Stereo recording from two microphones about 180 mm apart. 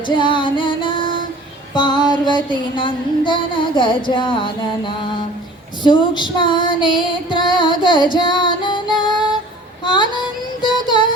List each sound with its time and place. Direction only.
0.1 s music: 25° left (ahead or behind)
10.6 s child singing: 25° left (ahead or behind)